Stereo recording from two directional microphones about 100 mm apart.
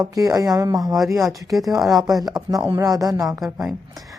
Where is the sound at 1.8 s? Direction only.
Centre (ahead or behind).